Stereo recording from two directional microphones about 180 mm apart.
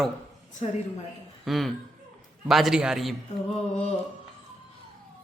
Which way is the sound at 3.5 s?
35° left (ahead or behind).